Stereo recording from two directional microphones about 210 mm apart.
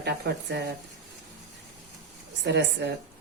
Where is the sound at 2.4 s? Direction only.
55° right (ahead or behind).